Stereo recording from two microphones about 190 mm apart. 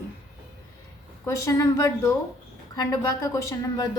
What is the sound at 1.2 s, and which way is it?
A woman's voice, 15° left (ahead or behind).